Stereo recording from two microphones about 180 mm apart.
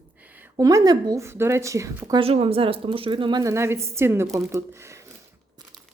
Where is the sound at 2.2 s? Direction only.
30° right (ahead or behind); by 4.9 s 15° right (ahead or behind).